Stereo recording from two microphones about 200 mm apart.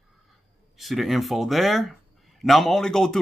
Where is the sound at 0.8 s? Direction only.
Centre (ahead or behind).